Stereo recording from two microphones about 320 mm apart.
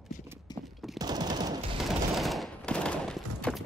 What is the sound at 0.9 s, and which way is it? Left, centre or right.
Machine gun, centre.